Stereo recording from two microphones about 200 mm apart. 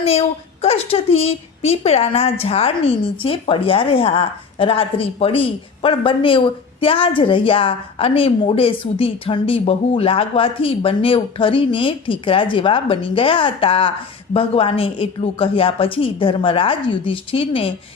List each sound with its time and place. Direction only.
0.0 s a woman's voice: 30° left (ahead or behind)